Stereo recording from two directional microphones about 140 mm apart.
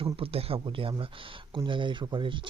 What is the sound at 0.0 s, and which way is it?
Speech, 45° right (ahead or behind).